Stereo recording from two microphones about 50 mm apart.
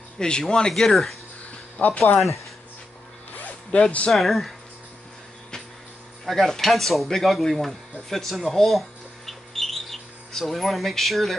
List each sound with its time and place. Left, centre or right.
0.2 s speech: centre
0.7 s speech: centre
1.8 s speech: left
3.7 s speech: left
4.1 s speech: centre
6.2 s speech: centre
8.1 s a sound: centre